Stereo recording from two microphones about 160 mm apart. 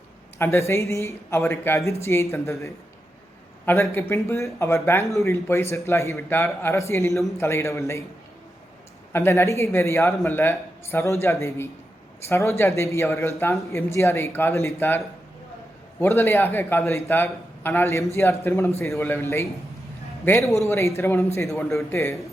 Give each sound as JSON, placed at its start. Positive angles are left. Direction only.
{"t": 0.3, "sound": "speech", "side_deg": 15}
{"t": 9.1, "sound": "speech", "side_deg": 15}